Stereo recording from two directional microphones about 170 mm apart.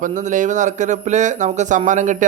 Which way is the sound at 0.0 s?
45° right (ahead or behind).